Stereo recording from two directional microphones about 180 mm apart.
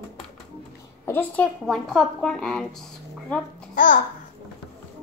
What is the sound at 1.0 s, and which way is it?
A woman's voice, 10° left (ahead or behind).